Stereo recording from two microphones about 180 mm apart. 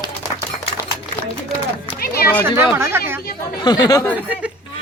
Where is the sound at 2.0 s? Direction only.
55° left (ahead or behind).